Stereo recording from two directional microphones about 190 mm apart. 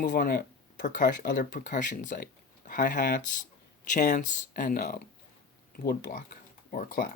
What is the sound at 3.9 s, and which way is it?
Speech, 40° left (ahead or behind).